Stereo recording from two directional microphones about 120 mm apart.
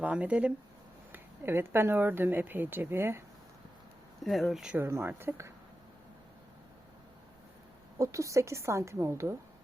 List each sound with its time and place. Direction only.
0.0 s speech: 10° right (ahead or behind)
4.2 s speech: centre (ahead or behind)
4.8 s a woman's voice: 20° right (ahead or behind)
7.9 s a woman's voice: 25° right (ahead or behind)